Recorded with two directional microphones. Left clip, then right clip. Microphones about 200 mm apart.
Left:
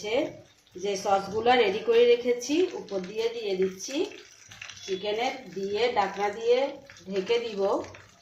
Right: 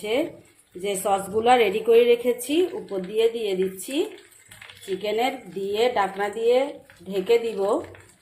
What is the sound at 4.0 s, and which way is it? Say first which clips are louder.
Speech: right 4 dB; 45° right (ahead or behind).